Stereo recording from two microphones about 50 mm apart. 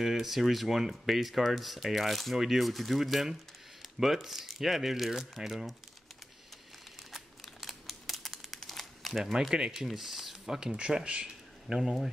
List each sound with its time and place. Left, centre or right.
0.0 s speech: centre
7.4 s crumpling: centre
9.2 s speech: centre
11.7 s speech: centre